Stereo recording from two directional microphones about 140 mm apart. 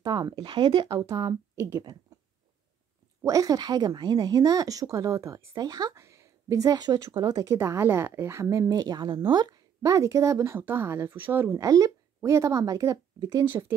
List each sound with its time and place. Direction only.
0.0 s speech: 30° right (ahead or behind)
1.5 s speech: 20° right (ahead or behind)
3.2 s speech: 25° right (ahead or behind)